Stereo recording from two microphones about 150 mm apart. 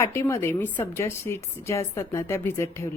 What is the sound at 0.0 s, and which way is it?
Speech, 20° left (ahead or behind).